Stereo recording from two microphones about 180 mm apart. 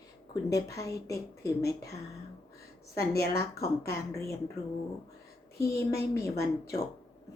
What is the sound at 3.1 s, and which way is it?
Speech, 60° left (ahead or behind).